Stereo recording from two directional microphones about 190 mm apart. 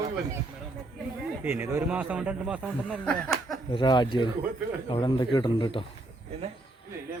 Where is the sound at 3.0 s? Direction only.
5° left (ahead or behind).